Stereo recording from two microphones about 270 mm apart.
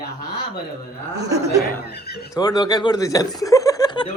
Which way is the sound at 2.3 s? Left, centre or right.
Centre.